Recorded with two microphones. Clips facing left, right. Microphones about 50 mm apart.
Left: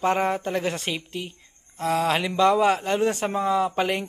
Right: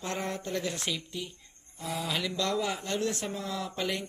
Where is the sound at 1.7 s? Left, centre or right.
Left.